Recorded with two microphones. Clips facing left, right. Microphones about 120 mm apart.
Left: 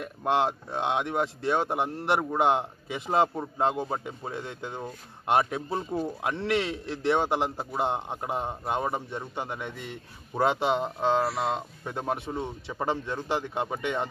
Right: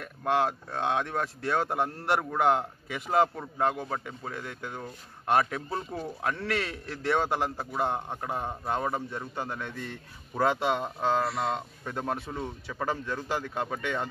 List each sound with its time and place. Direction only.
0.0 s speech: 20° left (ahead or behind)
11.2 s speech: 5° left (ahead or behind)